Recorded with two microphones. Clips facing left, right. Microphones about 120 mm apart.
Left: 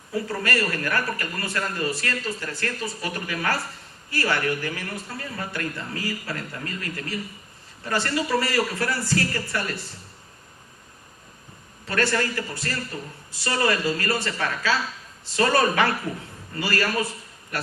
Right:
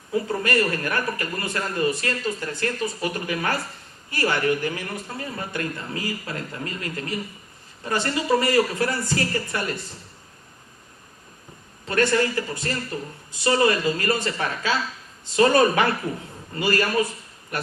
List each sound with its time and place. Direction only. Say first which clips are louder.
0.1 s a man's voice: right 3 dB; 20° right (ahead or behind)
11.9 s a man's voice: right 3 dB; 25° right (ahead or behind)